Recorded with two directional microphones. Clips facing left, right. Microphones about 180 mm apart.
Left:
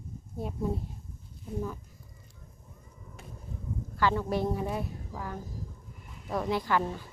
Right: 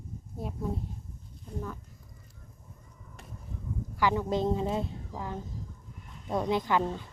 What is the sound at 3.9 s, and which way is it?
A woman's voice, 15° right (ahead or behind).